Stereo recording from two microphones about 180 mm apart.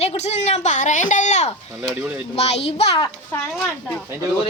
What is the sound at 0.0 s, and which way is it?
A woman's voice, 35° left (ahead or behind).